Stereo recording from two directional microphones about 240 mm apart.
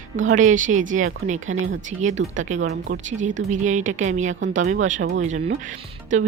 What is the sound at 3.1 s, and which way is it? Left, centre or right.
Speech, right.